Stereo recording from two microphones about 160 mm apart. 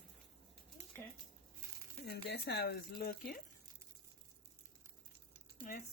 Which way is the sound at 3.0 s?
65° left (ahead or behind).